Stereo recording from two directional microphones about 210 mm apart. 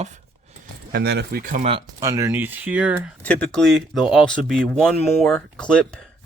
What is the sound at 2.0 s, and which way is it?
Speech, 15° right (ahead or behind).